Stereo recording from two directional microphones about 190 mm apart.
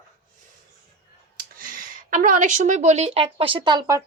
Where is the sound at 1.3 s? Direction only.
45° right (ahead or behind); by 4.0 s 20° right (ahead or behind).